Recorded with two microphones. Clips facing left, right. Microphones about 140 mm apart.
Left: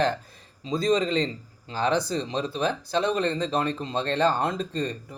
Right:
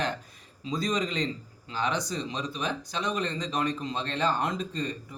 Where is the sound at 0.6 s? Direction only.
25° left (ahead or behind).